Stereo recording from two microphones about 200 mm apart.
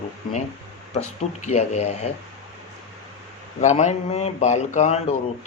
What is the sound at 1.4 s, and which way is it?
Speech, 35° left (ahead or behind).